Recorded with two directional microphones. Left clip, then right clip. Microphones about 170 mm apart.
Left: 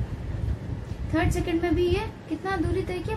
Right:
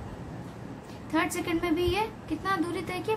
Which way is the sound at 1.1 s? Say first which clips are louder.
Left 2 dB; 35° right (ahead or behind).